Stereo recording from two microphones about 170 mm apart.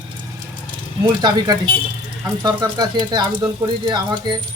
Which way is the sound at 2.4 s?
25° right (ahead or behind).